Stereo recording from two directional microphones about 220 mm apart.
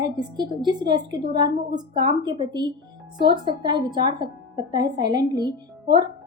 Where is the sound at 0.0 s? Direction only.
20° right (ahead or behind).